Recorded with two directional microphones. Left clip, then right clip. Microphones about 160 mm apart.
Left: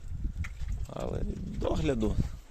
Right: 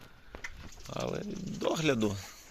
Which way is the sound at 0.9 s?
10° left (ahead or behind).